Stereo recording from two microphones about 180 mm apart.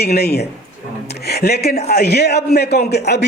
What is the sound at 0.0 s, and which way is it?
A man's voice, 60° left (ahead or behind).